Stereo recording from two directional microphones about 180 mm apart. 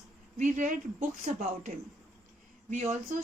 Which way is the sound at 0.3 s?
45° right (ahead or behind).